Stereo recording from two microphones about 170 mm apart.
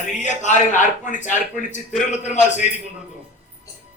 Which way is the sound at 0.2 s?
45° left (ahead or behind).